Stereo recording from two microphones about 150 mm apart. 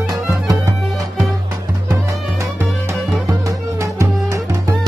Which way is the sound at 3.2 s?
20° right (ahead or behind).